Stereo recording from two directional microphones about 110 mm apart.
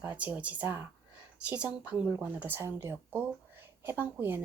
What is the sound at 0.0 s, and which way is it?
Speech, 15° right (ahead or behind).